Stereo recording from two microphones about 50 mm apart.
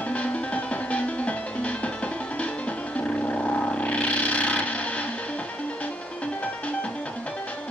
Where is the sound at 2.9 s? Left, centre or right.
Left.